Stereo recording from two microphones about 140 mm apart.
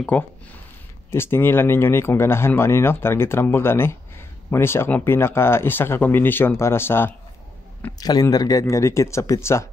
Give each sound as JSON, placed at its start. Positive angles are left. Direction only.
{"t": 0.0, "sound": "speech", "side_deg": 10}
{"t": 8.0, "sound": "speech", "side_deg": 30}